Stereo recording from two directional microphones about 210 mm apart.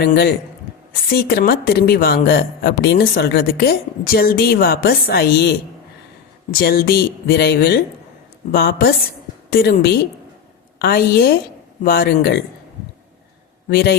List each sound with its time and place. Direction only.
0.0 s a woman's voice: 45° left (ahead or behind)
13.7 s a man's voice: 50° left (ahead or behind)